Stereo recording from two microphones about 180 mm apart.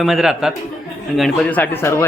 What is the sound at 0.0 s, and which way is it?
Speech, centre (ahead or behind).